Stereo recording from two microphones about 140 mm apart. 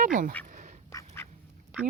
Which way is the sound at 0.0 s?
70° right (ahead or behind).